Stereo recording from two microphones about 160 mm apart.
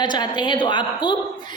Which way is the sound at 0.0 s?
25° left (ahead or behind).